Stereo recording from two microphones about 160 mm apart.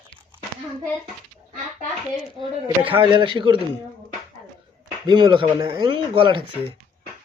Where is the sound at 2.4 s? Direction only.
30° right (ahead or behind).